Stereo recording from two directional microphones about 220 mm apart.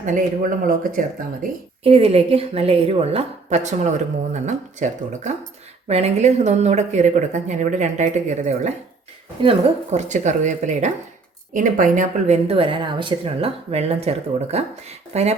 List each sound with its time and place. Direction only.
0.0 s speech: 35° right (ahead or behind)
1.8 s speech: 25° right (ahead or behind)